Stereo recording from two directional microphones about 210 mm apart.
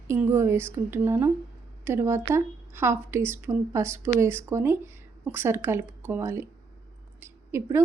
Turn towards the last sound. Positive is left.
turn(degrees=-10)  # may be behind; listen again after turning